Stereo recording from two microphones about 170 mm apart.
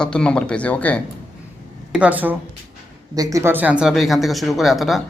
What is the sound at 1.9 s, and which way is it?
Speech, 10° right (ahead or behind).